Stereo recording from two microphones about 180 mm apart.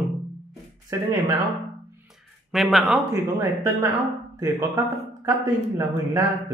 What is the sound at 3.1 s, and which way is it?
A man's voice, 20° right (ahead or behind).